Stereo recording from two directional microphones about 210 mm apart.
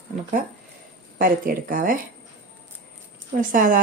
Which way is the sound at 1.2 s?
40° right (ahead or behind).